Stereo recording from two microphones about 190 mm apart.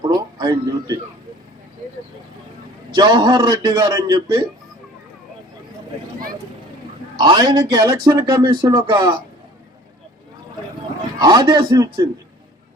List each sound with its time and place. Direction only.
0.0 s a sound: 20° right (ahead or behind)
2.9 s speech: 20° right (ahead or behind)
7.2 s speech: 20° right (ahead or behind)
11.2 s speech: 20° right (ahead or behind)